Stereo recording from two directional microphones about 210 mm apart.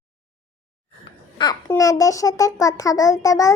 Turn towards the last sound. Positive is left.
turn(degrees=15)  # may be behind; listen again after turning